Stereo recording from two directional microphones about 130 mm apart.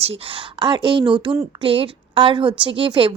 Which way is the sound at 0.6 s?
35° right (ahead or behind).